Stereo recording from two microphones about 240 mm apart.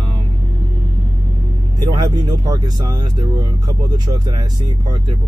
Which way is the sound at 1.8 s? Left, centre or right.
Centre.